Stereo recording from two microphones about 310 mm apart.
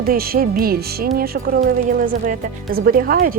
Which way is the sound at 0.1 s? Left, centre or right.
Right.